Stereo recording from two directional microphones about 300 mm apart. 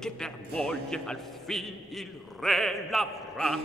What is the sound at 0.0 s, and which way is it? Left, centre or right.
A man's voice, centre.